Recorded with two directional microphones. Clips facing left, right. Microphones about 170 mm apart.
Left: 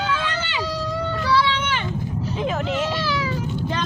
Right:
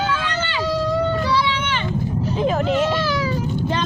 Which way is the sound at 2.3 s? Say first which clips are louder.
Right 5 dB; 35° right (ahead or behind).